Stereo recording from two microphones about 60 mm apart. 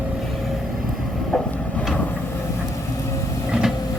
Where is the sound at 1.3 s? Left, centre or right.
Centre.